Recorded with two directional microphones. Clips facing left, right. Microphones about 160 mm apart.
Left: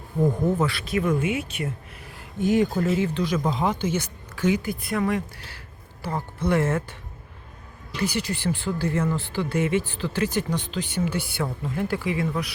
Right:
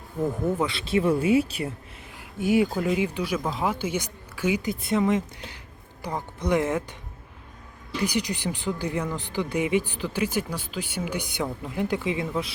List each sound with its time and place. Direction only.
0.7 s speech: 25° right (ahead or behind)
2.1 s speech: 10° right (ahead or behind)
4.7 s speech: 25° right (ahead or behind)
8.0 s speech: 15° right (ahead or behind)